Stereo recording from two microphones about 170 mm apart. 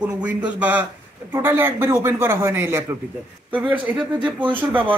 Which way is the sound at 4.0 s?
30° right (ahead or behind).